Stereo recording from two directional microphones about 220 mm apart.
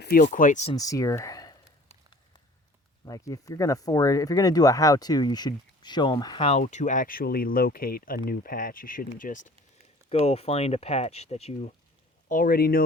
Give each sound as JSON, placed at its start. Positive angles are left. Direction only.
{"t": 0.0, "sound": "speech", "side_deg": 45}
{"t": 0.8, "sound": "speech", "side_deg": 15}
{"t": 3.1, "sound": "speech", "side_deg": 15}
{"t": 12.3, "sound": "speech", "side_deg": 40}